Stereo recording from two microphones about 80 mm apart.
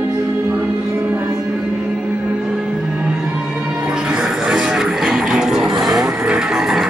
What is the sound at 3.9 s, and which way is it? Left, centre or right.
Music, centre.